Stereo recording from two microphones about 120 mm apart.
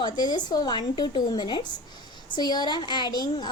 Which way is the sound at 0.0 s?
35° left (ahead or behind).